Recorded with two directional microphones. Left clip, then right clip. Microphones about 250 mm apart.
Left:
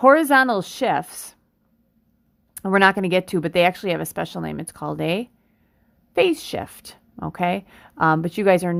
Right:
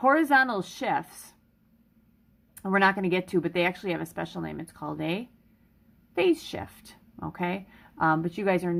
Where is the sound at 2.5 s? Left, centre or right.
Left.